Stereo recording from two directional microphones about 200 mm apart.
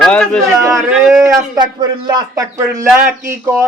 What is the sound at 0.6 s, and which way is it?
Speech, 15° right (ahead or behind).